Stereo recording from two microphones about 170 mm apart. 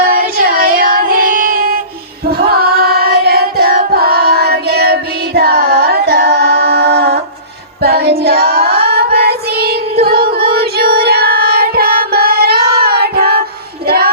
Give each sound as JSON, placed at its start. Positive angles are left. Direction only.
{"t": 0.0, "sound": "music", "side_deg": -55}
{"t": 2.5, "sound": "carnatic music", "side_deg": -65}
{"t": 7.8, "sound": "child singing", "side_deg": -70}
{"t": 10.0, "sound": "music", "side_deg": -65}